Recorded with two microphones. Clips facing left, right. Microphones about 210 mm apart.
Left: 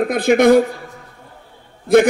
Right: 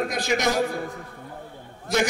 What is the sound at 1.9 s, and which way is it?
Speech, 55° left (ahead or behind).